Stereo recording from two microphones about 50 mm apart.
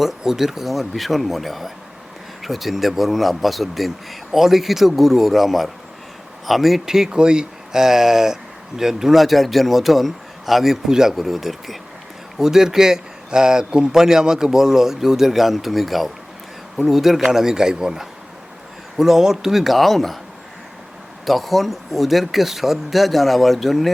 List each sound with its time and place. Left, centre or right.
0.2 s speech: centre
21.2 s speech: centre